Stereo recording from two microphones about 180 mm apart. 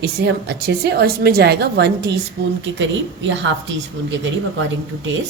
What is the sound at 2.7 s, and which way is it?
Speech, 90° right.